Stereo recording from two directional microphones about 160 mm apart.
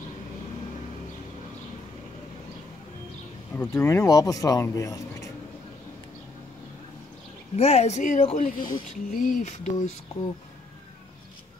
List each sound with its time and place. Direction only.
3.5 s speech: 15° left (ahead or behind)
7.5 s speech: 40° left (ahead or behind)